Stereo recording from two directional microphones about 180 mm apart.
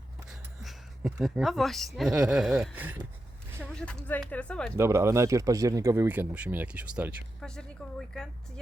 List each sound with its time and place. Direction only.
0.6 s a woman's voice: centre (ahead or behind)
3.6 s speech: 5° left (ahead or behind)
4.8 s a woman's voice: 15° right (ahead or behind); by 8.3 s centre (ahead or behind)